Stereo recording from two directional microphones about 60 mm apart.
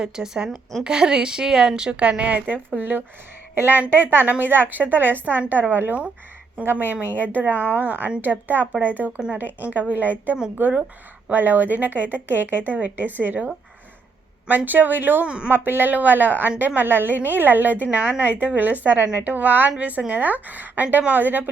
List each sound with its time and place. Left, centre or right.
0.0 s a woman's voice: centre; by 13.4 s right
14.4 s a woman's voice: right
15.3 s a woman's voice: centre
15.5 s a woman's voice: right